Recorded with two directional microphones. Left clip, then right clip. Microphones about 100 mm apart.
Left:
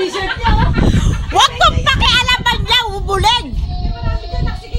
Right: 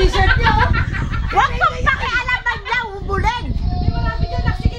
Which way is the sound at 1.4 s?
40° left (ahead or behind).